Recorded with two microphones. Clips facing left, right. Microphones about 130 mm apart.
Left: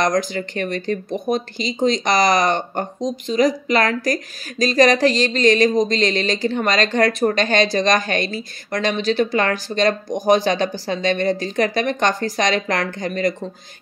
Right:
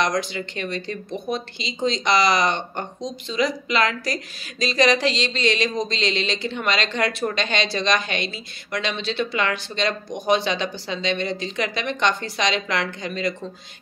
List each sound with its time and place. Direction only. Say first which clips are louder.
0.0 s speech: left 4 dB; 45° left (ahead or behind)